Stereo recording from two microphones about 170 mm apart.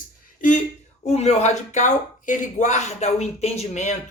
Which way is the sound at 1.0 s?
40° left (ahead or behind).